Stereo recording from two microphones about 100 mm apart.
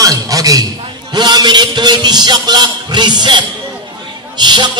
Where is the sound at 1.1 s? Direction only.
45° right (ahead or behind).